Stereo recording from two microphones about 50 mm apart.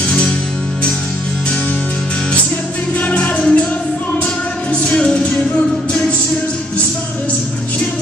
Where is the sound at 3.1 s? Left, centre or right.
Left.